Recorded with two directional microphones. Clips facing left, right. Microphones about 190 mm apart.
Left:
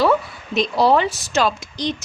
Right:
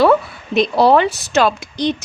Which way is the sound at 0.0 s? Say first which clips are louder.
Right 5 dB; 60° right (ahead or behind).